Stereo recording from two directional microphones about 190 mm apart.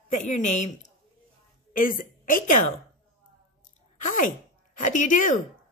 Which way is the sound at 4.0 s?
45° left (ahead or behind).